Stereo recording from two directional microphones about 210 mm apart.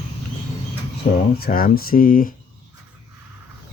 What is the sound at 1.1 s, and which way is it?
Speech, 45° left (ahead or behind).